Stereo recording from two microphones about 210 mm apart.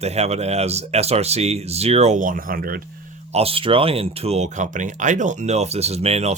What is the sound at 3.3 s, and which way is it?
Speech, 25° right (ahead or behind).